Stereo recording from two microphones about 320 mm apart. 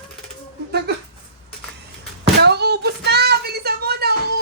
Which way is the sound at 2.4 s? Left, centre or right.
Right.